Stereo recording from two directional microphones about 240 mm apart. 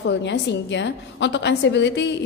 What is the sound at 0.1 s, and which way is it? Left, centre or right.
A woman's voice, left.